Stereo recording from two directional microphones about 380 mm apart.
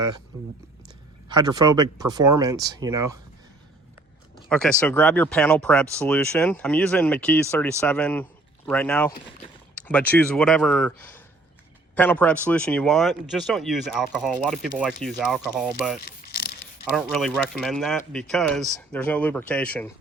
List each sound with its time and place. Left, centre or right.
1.3 s speech: centre
4.4 s speech: centre
16.0 s mechanisms: left
16.9 s speech: centre